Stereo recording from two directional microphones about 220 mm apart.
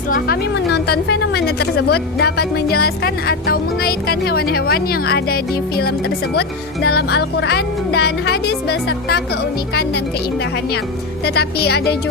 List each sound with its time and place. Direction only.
0.1 s a woman's voice: 45° left (ahead or behind)
11.3 s a woman's voice: 45° left (ahead or behind)